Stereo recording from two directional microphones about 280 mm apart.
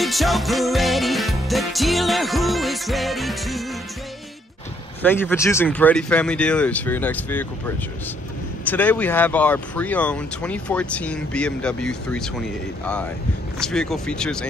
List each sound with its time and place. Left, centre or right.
0.0 s music: centre
5.0 s speech: centre
13.6 s speech: centre